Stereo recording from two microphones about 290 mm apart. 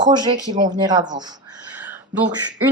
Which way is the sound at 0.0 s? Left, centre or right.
Centre.